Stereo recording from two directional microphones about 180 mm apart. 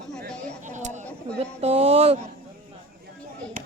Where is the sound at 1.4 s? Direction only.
35° right (ahead or behind).